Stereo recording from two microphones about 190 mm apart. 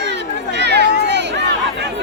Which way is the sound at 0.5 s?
65° right (ahead or behind).